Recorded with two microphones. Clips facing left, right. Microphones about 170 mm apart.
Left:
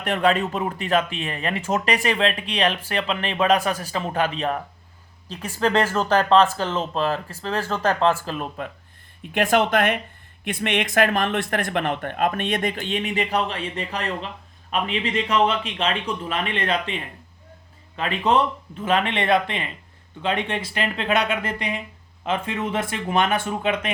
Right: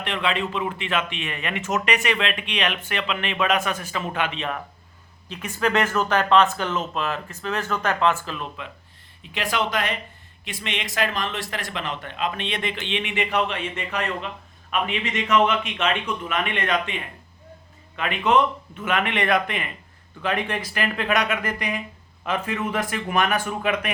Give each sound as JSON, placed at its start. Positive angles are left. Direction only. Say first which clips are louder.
{"t": 0.0, "sound": "speech", "louder": "left 5 dB", "side_deg": 45}
{"t": 8.2, "sound": "speech", "louder": "left 4 dB", "side_deg": 45}